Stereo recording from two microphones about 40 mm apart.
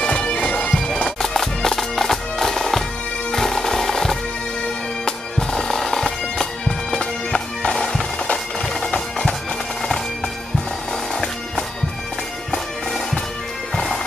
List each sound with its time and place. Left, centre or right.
0.0 s bagpipes: left
1.0 s bagpipes: centre
3.3 s music: centre
5.0 s bagpipes: centre
7.7 s bagpipes: centre